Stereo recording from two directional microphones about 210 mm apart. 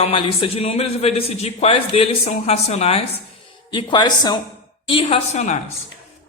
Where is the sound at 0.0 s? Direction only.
25° left (ahead or behind).